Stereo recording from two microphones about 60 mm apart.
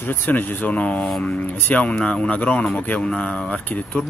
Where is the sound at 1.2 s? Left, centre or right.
Left.